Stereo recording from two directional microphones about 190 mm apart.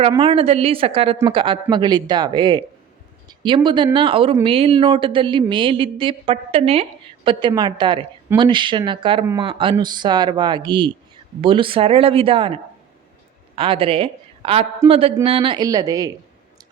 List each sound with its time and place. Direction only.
0.1 s a woman's voice: 30° right (ahead or behind)
13.6 s a woman's voice: 30° right (ahead or behind)